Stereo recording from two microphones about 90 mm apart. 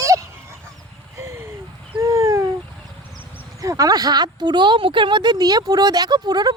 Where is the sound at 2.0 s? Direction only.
35° right (ahead or behind).